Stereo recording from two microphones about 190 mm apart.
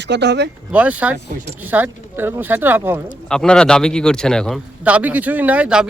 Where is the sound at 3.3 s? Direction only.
5° left (ahead or behind).